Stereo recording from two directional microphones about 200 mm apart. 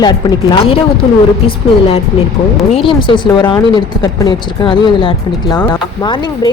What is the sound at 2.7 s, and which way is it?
Speech, 25° left (ahead or behind).